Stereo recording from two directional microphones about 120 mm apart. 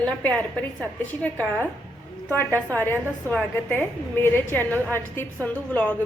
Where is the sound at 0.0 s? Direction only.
10° left (ahead or behind).